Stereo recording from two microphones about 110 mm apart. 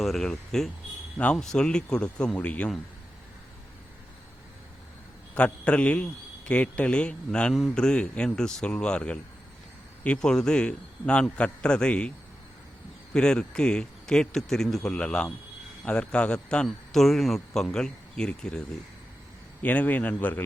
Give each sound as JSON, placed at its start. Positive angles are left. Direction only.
{"t": 0.0, "sound": "a man's voice", "side_deg": 0}
{"t": 5.3, "sound": "a man's voice", "side_deg": 10}
{"t": 13.1, "sound": "a man's voice", "side_deg": 5}
{"t": 19.6, "sound": "a man's voice", "side_deg": 15}